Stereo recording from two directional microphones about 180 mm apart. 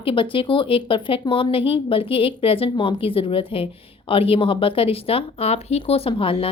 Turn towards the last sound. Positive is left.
turn(degrees=30)  # may be behind; listen again after turning